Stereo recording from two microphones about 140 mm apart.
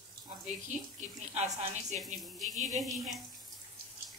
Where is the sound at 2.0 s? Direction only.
Centre (ahead or behind).